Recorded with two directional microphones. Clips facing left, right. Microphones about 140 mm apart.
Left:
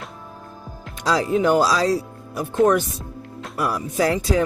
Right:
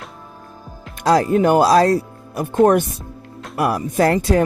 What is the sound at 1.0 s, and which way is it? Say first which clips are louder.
Speech: right 4 dB; 55° right (ahead or behind).